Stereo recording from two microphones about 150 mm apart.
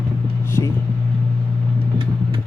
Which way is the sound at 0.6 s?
30° right (ahead or behind).